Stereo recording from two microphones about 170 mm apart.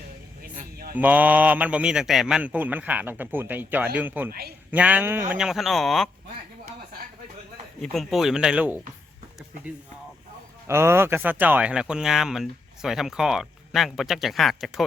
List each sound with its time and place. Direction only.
0.4 s a sound: 55° right (ahead or behind)
0.9 s a man's voice: 10° right (ahead or behind)
4.3 s a man's voice: 65° right (ahead or behind)
4.7 s speech: 10° right (ahead or behind)
7.8 s speech: centre (ahead or behind)
10.7 s speech: 15° right (ahead or behind)